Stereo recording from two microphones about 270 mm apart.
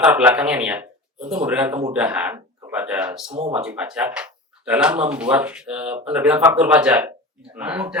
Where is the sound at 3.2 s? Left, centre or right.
Right.